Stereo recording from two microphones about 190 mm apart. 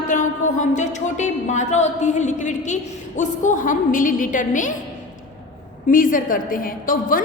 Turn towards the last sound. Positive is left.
turn(degrees=45)  # may be behind; listen again after turning